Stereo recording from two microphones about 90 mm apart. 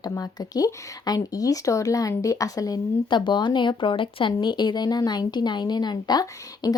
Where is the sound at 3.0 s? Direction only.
60° left (ahead or behind).